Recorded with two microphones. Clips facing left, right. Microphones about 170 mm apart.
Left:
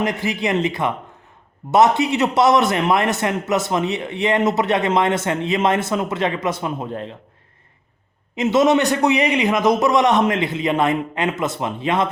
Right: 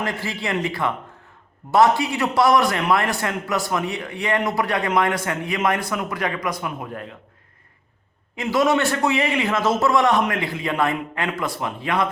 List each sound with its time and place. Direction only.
0.0 s a man's voice: 20° left (ahead or behind)
8.4 s a man's voice: 20° left (ahead or behind)